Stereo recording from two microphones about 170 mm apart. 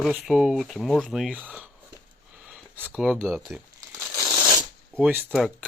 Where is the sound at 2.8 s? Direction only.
5° right (ahead or behind).